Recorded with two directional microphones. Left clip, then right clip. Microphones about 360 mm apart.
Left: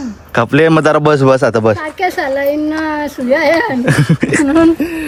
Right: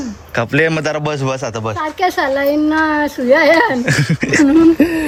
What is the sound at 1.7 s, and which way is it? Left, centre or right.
A child's voice, centre.